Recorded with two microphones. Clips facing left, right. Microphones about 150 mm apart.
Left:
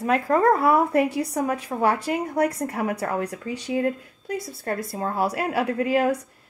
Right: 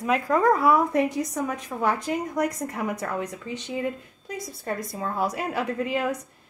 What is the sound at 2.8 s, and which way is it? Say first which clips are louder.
Speech: left 2 dB; 60° left (ahead or behind).